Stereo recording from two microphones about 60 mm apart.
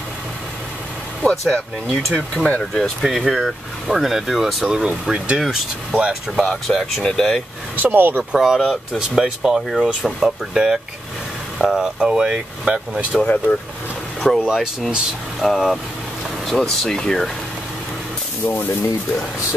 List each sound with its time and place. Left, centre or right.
1.3 s speech: centre
2.4 s speech: centre
3.0 s speech: centre
5.0 s speech: centre
5.4 s speech: centre
6.4 s speech: centre
7.8 s speech: right
8.3 s speech: centre
13.2 s speech: left
14.2 s speech: centre
18.4 s speech: left